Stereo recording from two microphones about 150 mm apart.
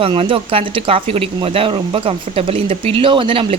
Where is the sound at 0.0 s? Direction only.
35° right (ahead or behind).